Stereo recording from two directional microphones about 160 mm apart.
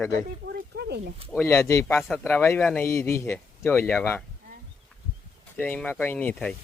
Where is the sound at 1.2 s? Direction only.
10° left (ahead or behind).